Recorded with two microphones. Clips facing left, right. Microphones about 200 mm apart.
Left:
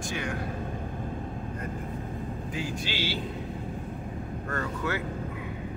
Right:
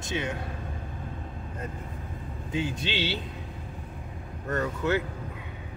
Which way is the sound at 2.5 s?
20° right (ahead or behind).